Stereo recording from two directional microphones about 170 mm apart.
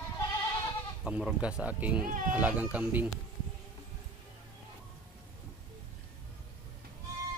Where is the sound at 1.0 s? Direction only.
5° right (ahead or behind).